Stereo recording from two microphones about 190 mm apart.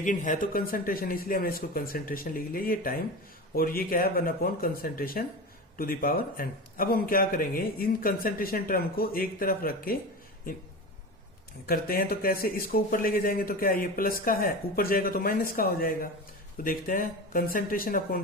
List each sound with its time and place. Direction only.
0.0 s speech: 40° left (ahead or behind)
11.6 s speech: 50° left (ahead or behind)